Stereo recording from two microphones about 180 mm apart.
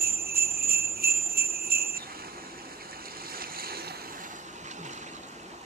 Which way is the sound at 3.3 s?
55° right (ahead or behind).